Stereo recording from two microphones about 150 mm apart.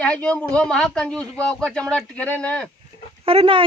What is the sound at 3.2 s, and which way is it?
Speech, 40° right (ahead or behind).